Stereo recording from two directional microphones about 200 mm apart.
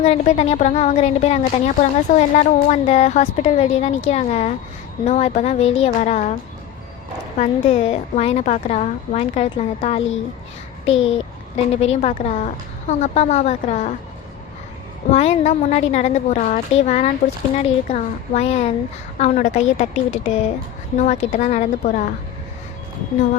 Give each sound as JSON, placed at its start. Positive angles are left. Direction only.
{"t": 0.0, "sound": "a woman's voice", "side_deg": 35}
{"t": 7.3, "sound": "a woman's voice", "side_deg": 35}
{"t": 10.8, "sound": "a child's voice", "side_deg": 75}
{"t": 11.5, "sound": "a woman's voice", "side_deg": 30}
{"t": 15.1, "sound": "a woman's voice", "side_deg": 35}